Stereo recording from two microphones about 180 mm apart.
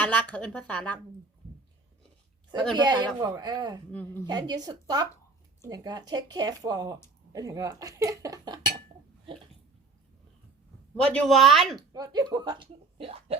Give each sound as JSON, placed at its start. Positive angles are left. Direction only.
{"t": 0.0, "sound": "speech", "side_deg": 10}
{"t": 2.7, "sound": "speech", "side_deg": -20}
{"t": 3.9, "sound": "speech", "side_deg": 10}
{"t": 4.3, "sound": "speech", "side_deg": -20}
{"t": 11.0, "sound": "speech", "side_deg": 5}
{"t": 11.8, "sound": "speech", "side_deg": -20}